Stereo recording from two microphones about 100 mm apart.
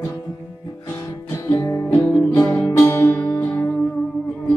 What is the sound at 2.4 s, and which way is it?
Music, 30° left (ahead or behind).